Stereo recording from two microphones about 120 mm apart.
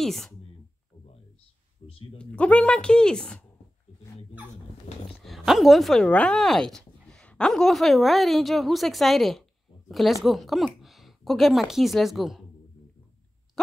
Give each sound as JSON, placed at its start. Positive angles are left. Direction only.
{"t": 0.0, "sound": "speech", "side_deg": 5}
{"t": 1.8, "sound": "a sound", "side_deg": 55}
{"t": 2.1, "sound": "speech", "side_deg": 10}
{"t": 4.9, "sound": "dog", "side_deg": 65}
{"t": 5.2, "sound": "speech", "side_deg": 0}